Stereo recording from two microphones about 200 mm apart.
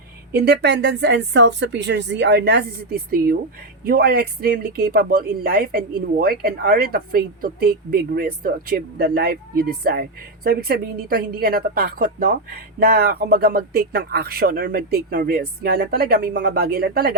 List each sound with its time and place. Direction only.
0.3 s speech: 55° right (ahead or behind)